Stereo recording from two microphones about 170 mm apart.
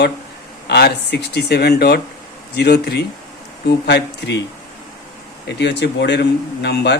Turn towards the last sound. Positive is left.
turn(degrees=85)